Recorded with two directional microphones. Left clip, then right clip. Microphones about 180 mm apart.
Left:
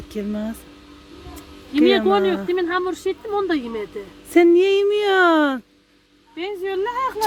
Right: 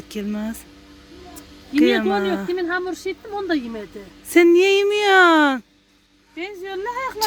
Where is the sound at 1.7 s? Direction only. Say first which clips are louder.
Left 2 dB; 5° right (ahead or behind).